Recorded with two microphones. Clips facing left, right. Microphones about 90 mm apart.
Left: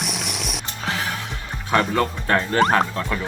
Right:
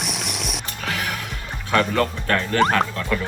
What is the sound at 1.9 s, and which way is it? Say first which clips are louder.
Speech: left 1 dB; 20° left (ahead or behind).